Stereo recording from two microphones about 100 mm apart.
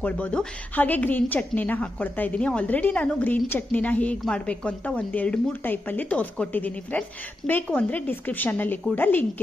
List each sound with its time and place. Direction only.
0.0 s a woman's voice: 15° left (ahead or behind)